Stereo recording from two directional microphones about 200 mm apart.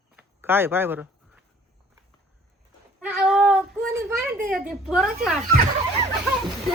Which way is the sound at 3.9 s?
15° right (ahead or behind).